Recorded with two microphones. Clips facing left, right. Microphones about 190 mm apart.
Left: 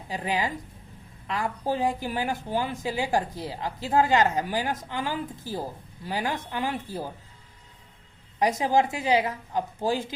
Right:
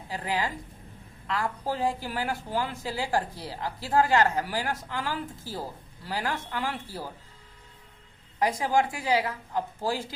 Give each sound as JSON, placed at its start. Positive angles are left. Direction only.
{"t": 0.1, "sound": "a woman's voice", "side_deg": 20}
{"t": 8.4, "sound": "a woman's voice", "side_deg": 20}